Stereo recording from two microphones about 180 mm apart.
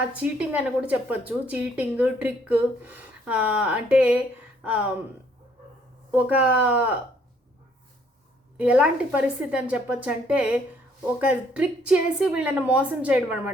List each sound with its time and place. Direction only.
0.2 s a woman's voice: 5° right (ahead or behind)
6.1 s a woman's voice: 10° right (ahead or behind)
8.5 s a woman's voice: 5° right (ahead or behind)